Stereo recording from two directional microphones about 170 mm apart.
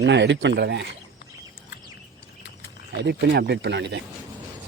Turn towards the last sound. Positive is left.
turn(degrees=-90)